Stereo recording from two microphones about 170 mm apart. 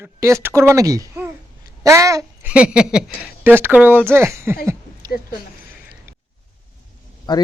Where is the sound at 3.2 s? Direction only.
10° right (ahead or behind).